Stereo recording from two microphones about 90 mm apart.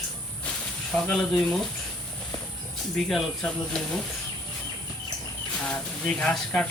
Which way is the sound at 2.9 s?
5° left (ahead or behind).